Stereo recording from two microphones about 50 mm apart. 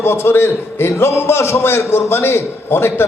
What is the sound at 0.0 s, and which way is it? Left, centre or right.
A man's voice, left.